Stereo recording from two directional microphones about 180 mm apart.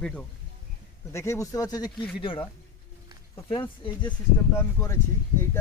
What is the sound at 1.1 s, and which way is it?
Speech, 15° left (ahead or behind).